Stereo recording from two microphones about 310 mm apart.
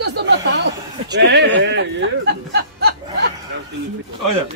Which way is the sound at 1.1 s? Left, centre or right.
Right.